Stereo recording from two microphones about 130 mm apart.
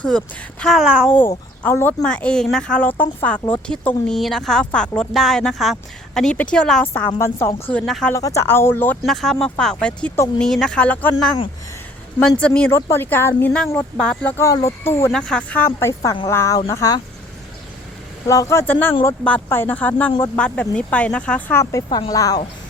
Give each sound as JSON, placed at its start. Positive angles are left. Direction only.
{"t": 0.0, "sound": "speech", "side_deg": 5}
{"t": 1.6, "sound": "speech", "side_deg": 15}
{"t": 7.2, "sound": "speech", "side_deg": 20}
{"t": 7.7, "sound": "speech", "side_deg": 5}
{"t": 8.1, "sound": "speech", "side_deg": 25}
{"t": 9.0, "sound": "speech", "side_deg": 5}
{"t": 12.4, "sound": "speech", "side_deg": 10}
{"t": 12.7, "sound": "speech", "side_deg": 20}
{"t": 14.3, "sound": "speech", "side_deg": 25}
{"t": 15.1, "sound": "speech", "side_deg": 5}
{"t": 18.3, "sound": "speech", "side_deg": 25}